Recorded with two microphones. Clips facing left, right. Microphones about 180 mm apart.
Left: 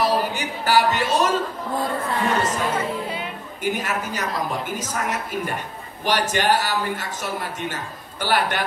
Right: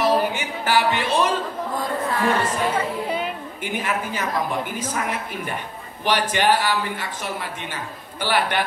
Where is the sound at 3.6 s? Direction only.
45° left (ahead or behind).